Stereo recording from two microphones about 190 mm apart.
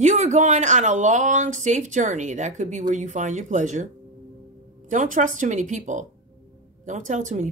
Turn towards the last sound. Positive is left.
turn(degrees=-40)  # may be behind; listen again after turning